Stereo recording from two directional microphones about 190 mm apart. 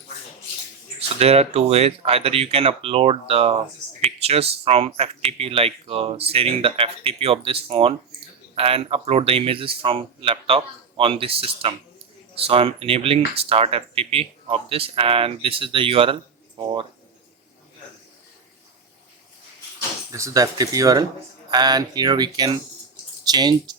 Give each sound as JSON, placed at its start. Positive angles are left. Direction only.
{"t": 0.9, "sound": "speech", "side_deg": -35}
{"t": 20.1, "sound": "speech", "side_deg": -15}